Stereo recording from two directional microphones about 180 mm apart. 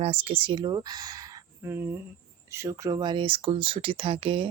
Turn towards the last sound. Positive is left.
turn(degrees=-30)  # may be behind; listen again after turning